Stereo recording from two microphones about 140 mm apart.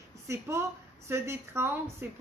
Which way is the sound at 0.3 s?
20° right (ahead or behind).